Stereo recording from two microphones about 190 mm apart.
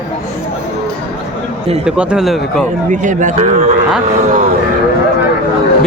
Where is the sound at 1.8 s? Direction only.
5° right (ahead or behind).